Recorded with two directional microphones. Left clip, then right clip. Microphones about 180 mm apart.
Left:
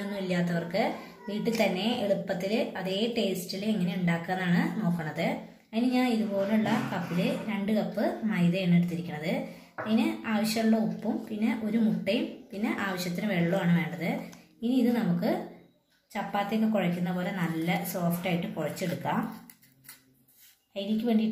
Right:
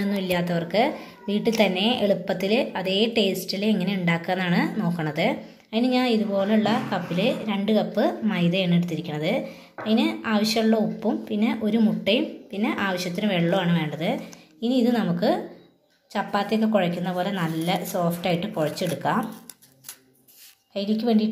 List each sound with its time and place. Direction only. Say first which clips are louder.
0.1 s a woman's voice: right 5 dB; 45° right (ahead or behind)
20.7 s a woman's voice: right 6 dB; 45° right (ahead or behind)